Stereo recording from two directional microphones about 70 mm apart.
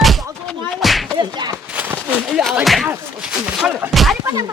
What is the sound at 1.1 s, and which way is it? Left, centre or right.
Speech, right.